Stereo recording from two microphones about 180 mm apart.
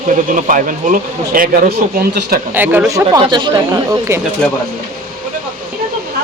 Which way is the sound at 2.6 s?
10° right (ahead or behind).